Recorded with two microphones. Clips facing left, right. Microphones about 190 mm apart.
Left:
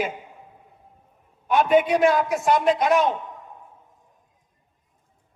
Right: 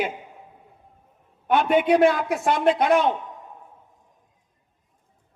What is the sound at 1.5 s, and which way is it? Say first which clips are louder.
A man's voice: even; 60° right (ahead or behind).